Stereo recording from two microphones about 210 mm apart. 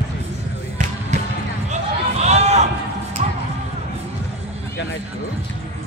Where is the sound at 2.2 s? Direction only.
30° right (ahead or behind).